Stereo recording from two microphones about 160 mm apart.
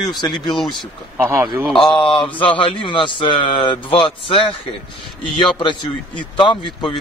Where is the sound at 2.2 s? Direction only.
30° left (ahead or behind).